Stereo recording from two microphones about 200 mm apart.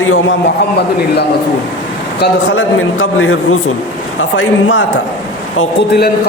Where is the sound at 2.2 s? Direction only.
80° left.